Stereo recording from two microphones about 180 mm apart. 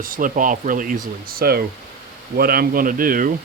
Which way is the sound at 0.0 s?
50° right (ahead or behind).